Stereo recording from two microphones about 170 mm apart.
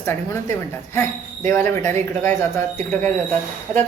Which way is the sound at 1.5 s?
15° left (ahead or behind).